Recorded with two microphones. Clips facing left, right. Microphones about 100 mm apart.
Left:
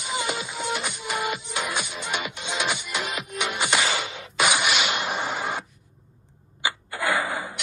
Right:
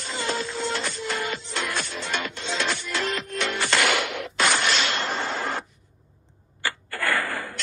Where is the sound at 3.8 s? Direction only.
65° right (ahead or behind).